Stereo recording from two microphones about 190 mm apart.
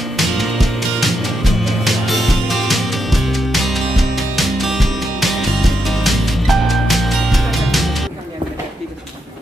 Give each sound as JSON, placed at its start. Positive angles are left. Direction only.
{"t": 0.2, "sound": "music", "side_deg": 0}